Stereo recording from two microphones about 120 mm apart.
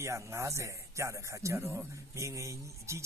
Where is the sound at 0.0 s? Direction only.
25° right (ahead or behind).